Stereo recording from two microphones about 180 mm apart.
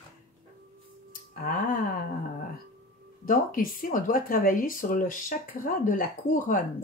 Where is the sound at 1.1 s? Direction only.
50° left (ahead or behind).